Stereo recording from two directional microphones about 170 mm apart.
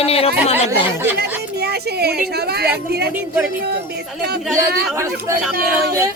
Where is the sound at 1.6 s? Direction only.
70° right (ahead or behind).